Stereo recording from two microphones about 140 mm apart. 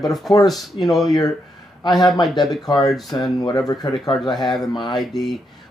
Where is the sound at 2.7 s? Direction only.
25° left (ahead or behind).